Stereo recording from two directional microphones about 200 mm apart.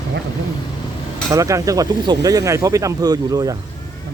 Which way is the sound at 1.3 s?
15° right (ahead or behind).